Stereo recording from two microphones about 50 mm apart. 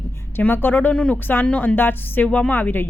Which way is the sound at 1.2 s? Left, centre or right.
Left.